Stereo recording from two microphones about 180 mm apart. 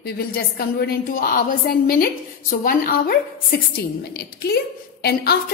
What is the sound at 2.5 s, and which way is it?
Speech, 50° left (ahead or behind).